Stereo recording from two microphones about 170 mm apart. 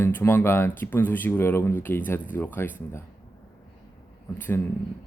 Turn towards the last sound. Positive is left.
turn(degrees=10)  # may be behind; listen again after turning